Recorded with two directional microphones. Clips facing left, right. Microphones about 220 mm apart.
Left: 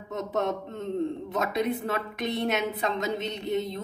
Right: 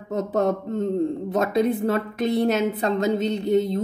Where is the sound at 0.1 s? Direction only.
30° right (ahead or behind).